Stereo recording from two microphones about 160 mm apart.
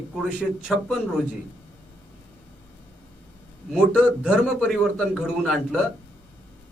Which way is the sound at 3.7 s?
5° right (ahead or behind).